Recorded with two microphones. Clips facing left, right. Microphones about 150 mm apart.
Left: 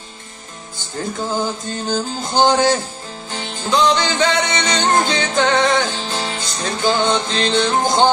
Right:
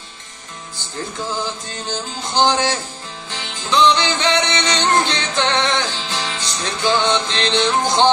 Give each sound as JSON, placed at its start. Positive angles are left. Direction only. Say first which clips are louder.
{"t": 1.4, "sound": "music", "louder": "left 4 dB", "side_deg": 45}